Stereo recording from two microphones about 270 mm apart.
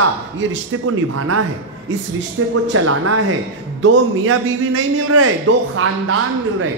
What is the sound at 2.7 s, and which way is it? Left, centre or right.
A man's voice, right.